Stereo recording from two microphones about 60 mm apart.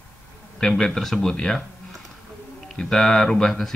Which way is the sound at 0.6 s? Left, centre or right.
Centre.